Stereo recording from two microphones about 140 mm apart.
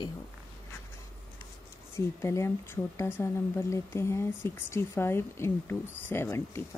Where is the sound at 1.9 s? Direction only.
20° left (ahead or behind).